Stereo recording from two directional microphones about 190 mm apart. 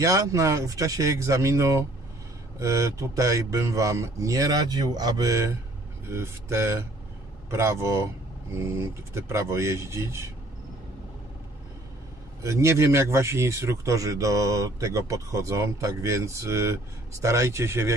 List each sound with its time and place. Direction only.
0.0 s speech: 15° right (ahead or behind)
12.4 s speech: 15° right (ahead or behind)